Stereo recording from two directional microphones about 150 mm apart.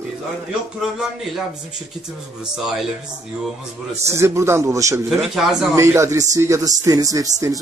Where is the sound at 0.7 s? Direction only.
5° right (ahead or behind).